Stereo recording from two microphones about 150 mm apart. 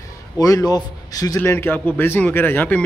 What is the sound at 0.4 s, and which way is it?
A man's voice, 25° left (ahead or behind).